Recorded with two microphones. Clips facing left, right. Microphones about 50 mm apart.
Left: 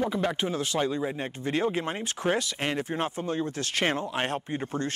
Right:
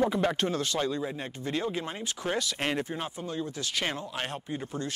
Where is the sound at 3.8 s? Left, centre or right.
Left.